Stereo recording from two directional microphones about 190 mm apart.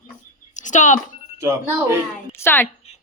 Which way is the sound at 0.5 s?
40° left (ahead or behind).